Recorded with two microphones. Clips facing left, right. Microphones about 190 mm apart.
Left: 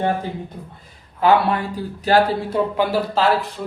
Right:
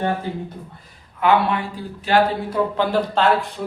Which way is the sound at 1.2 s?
35° left (ahead or behind).